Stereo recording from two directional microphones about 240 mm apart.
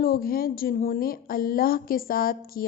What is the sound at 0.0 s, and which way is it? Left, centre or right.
A woman's voice, left.